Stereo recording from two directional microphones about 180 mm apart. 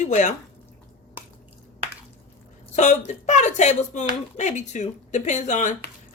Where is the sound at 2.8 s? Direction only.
40° left (ahead or behind).